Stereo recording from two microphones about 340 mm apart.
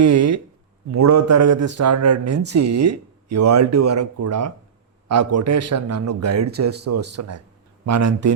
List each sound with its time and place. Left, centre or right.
0.0 s speech: right